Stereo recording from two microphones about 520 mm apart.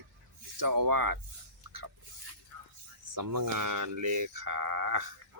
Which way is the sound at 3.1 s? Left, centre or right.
Right.